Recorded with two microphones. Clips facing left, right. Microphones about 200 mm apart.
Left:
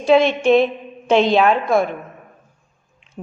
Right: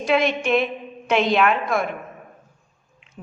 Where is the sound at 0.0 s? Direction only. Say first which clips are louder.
Left 6 dB; 30° left (ahead or behind).